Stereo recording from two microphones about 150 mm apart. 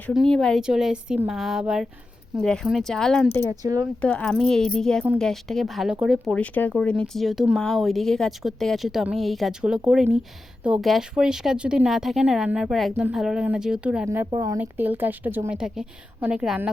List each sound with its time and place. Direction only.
0.1 s speech: centre (ahead or behind)
3.5 s speech: 25° right (ahead or behind)
4.0 s speech: 5° left (ahead or behind)
6.3 s a woman's voice: 10° left (ahead or behind); by 14.1 s 5° right (ahead or behind)
14.3 s speech: 25° right (ahead or behind)
14.6 s a woman's voice: 10° right (ahead or behind)